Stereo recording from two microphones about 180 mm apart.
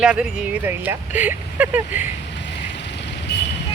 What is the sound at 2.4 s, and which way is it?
Vehicle, 75° left (ahead or behind).